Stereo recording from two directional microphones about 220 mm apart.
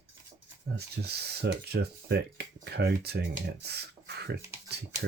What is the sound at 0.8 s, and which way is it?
Speech, 45° right (ahead or behind).